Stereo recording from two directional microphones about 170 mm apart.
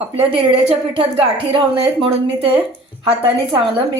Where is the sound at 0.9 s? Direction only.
30° right (ahead or behind).